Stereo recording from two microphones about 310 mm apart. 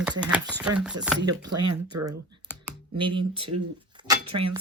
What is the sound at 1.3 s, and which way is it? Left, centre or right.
Speech, right.